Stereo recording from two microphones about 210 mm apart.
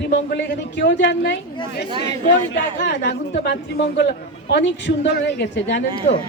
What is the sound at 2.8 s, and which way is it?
A man's voice, 55° left (ahead or behind).